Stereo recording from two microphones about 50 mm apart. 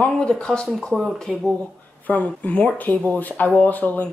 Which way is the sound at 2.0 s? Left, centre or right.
Left.